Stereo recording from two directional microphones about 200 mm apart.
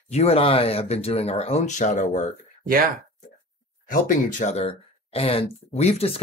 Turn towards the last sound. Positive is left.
turn(degrees=30)  # may be behind; listen again after turning